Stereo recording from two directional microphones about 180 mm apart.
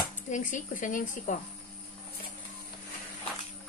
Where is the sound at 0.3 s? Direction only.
45° left (ahead or behind).